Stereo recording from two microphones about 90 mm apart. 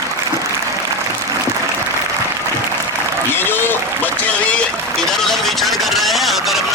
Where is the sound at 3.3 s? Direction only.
25° left (ahead or behind).